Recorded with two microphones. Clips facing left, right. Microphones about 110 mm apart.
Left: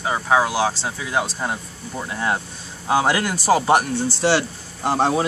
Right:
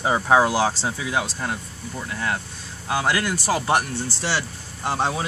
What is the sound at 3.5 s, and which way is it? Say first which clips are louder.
Speech: left 6 dB; 20° left (ahead or behind).